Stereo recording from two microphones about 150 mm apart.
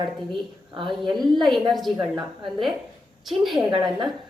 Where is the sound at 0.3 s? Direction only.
30° right (ahead or behind).